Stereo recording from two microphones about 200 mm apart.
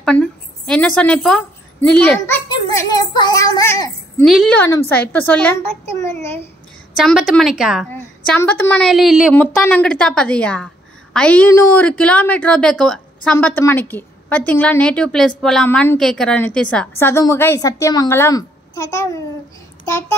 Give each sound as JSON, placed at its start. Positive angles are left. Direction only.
{"t": 0.0, "sound": "a woman's voice", "side_deg": 5}
{"t": 4.2, "sound": "a child's voice", "side_deg": 0}
{"t": 7.0, "sound": "a woman's voice", "side_deg": 0}
{"t": 8.3, "sound": "a woman's voice", "side_deg": 10}
{"t": 8.9, "sound": "a woman's voice", "side_deg": 0}